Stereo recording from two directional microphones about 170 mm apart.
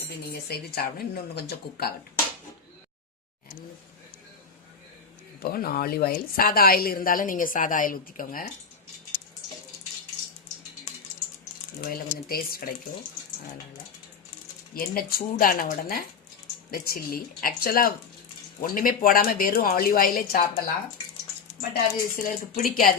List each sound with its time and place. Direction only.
0.4 s speech: 65° left (ahead or behind)
5.4 s a woman's voice: 60° left (ahead or behind)
11.9 s a woman's voice: 60° left (ahead or behind)
14.7 s a woman's voice: 60° left (ahead or behind)
21.7 s a woman's voice: 55° left (ahead or behind)